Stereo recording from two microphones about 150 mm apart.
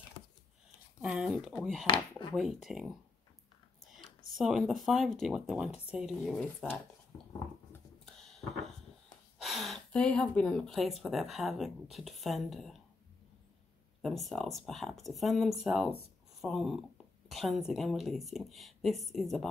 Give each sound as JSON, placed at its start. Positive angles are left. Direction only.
{"t": 1.0, "sound": "speech", "side_deg": -5}
{"t": 1.9, "sound": "speech", "side_deg": 30}
{"t": 2.3, "sound": "speech", "side_deg": 0}
{"t": 4.4, "sound": "speech", "side_deg": 0}
{"t": 8.0, "sound": "a sound", "side_deg": 0}
{"t": 9.4, "sound": "speech", "side_deg": 0}
{"t": 14.0, "sound": "speech", "side_deg": 0}